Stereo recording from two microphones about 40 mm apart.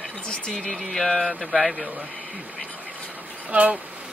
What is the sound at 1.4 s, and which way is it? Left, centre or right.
Speech, right.